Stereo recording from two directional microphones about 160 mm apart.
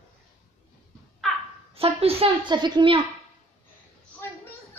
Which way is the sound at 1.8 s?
35° right (ahead or behind).